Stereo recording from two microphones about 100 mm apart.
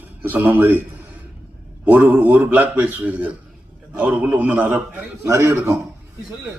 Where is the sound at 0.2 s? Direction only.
20° right (ahead or behind).